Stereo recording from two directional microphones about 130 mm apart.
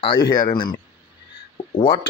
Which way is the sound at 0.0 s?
40° left (ahead or behind).